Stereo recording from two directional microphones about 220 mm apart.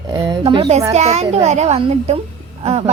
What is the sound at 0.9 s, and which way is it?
A woman's voice, 30° right (ahead or behind).